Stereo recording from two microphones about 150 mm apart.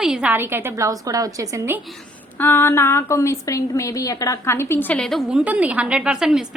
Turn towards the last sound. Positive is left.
turn(degrees=-5)  # may be behind; listen again after turning